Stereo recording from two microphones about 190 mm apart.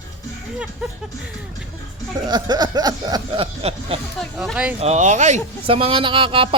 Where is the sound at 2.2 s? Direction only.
20° right (ahead or behind).